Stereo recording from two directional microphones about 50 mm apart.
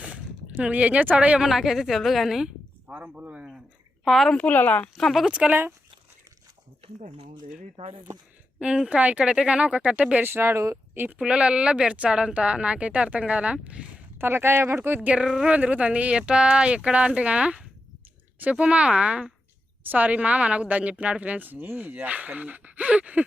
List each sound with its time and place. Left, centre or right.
0.0 s a sound: right
0.6 s speech: right
1.4 s a woman's voice: centre
2.8 s speech: right
4.0 s speech: centre
4.4 s speech: left
4.9 s a woman's voice: centre
5.3 s speech: right
8.5 s speech: centre
10.2 s speech: right
11.2 s speech: right
14.2 s speech: right
15.0 s speech: right